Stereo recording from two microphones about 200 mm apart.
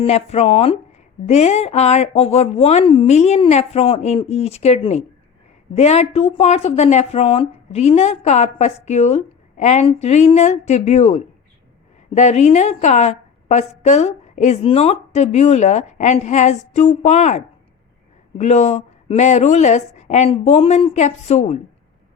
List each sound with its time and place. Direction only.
0.0 s speech: 30° left (ahead or behind)